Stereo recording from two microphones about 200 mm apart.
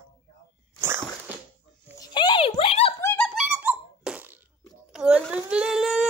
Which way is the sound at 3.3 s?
5° right (ahead or behind).